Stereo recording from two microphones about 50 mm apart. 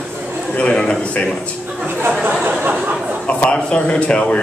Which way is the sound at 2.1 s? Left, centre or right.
Right.